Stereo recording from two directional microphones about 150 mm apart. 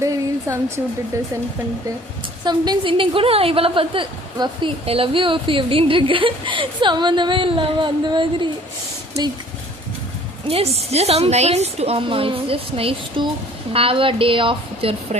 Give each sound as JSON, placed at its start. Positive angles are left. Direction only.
{"t": 0.0, "sound": "speech", "side_deg": -20}
{"t": 2.4, "sound": "a woman's voice", "side_deg": -30}
{"t": 10.5, "sound": "a woman's voice", "side_deg": -45}